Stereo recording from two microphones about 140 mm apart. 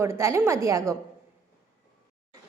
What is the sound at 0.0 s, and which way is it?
Speech, 20° right (ahead or behind).